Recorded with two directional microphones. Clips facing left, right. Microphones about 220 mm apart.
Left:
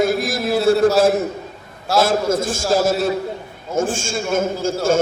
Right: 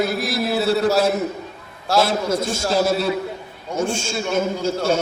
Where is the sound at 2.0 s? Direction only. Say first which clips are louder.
Left 3 dB; 50° left (ahead or behind).